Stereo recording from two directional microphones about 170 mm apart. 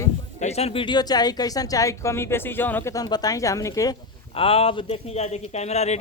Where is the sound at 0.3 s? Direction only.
40° left (ahead or behind); by 3.9 s 20° left (ahead or behind).